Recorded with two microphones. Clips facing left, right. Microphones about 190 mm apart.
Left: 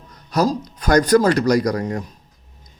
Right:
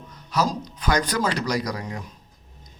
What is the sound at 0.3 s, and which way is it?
Speech, 40° left (ahead or behind).